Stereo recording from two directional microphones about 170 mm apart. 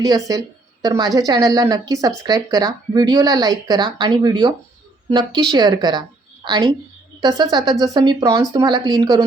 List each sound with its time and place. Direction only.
0.0 s a woman's voice: 20° right (ahead or behind)